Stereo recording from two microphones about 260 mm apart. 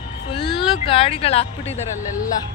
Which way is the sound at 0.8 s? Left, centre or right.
Left.